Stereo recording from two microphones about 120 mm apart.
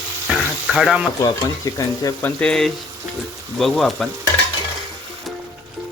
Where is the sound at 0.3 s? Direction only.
5° right (ahead or behind).